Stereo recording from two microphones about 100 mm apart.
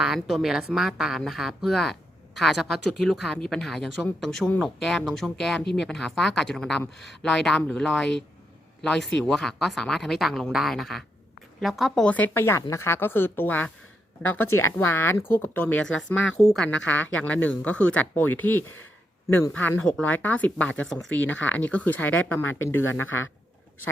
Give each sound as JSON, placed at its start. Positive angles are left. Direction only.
{"t": 0.0, "sound": "speech", "side_deg": -5}
{"t": 12.0, "sound": "speech", "side_deg": 15}
{"t": 20.8, "sound": "speech", "side_deg": 5}
{"t": 21.2, "sound": "speech", "side_deg": 15}